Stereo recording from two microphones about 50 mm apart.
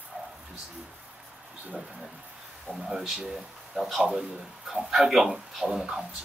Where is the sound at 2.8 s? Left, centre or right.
Centre.